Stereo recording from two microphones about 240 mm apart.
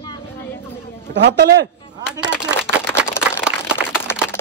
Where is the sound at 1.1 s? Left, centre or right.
Right.